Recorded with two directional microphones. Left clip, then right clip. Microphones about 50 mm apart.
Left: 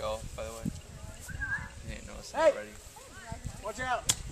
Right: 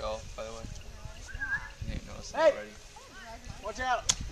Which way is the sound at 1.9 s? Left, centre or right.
Left.